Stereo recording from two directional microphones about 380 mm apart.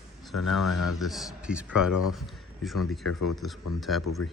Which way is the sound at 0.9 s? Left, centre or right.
Centre.